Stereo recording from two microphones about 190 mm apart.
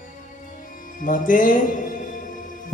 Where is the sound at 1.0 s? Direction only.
45° left (ahead or behind).